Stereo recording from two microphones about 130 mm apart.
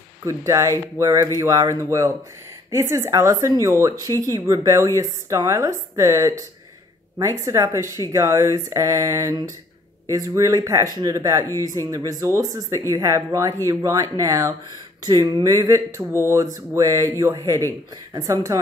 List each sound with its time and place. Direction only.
0.2 s speech: 25° right (ahead or behind)